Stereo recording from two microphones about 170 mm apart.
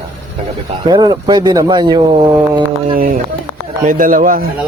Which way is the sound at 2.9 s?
55° right (ahead or behind).